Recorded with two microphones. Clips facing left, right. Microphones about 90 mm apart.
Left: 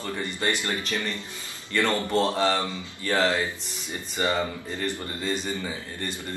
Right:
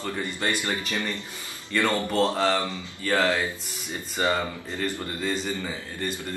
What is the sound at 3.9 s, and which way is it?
Speech, 15° right (ahead or behind).